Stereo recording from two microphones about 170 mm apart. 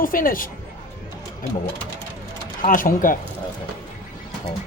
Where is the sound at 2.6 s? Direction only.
50° left (ahead or behind).